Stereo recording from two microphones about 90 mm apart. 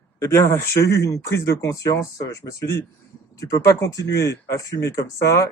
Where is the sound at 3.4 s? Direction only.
40° left (ahead or behind).